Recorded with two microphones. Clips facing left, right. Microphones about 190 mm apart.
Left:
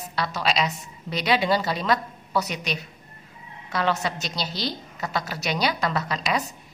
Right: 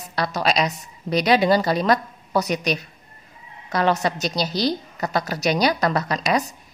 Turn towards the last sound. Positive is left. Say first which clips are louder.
# right 4 dB
turn(degrees=-40)  # may be behind; listen again after turning